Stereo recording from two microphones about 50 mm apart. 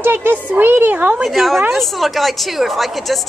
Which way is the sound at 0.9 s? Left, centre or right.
Right.